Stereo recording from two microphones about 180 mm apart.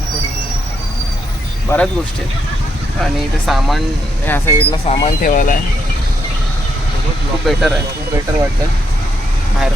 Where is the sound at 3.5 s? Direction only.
Centre (ahead or behind).